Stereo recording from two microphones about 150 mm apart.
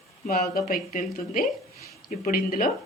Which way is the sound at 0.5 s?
75° left (ahead or behind).